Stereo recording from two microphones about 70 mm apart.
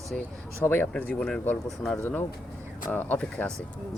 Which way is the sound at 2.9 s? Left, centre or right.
Left.